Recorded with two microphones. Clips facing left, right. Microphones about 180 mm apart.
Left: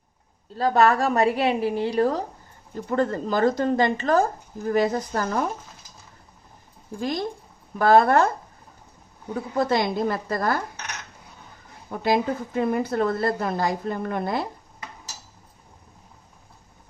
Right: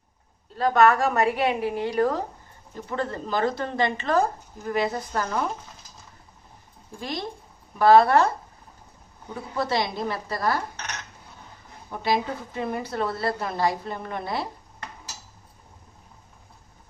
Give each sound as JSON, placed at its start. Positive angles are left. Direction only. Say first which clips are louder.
{"t": 0.5, "sound": "a woman's voice", "louder": "even", "side_deg": 35}
{"t": 2.9, "sound": "a woman's voice", "louder": "left 5 dB", "side_deg": 45}
{"t": 7.0, "sound": "a woman's voice", "louder": "left 5 dB", "side_deg": 45}
{"t": 9.6, "sound": "a woman's voice", "louder": "left 4 dB", "side_deg": 50}
{"t": 12.0, "sound": "a woman's voice", "louder": "left 3 dB", "side_deg": 50}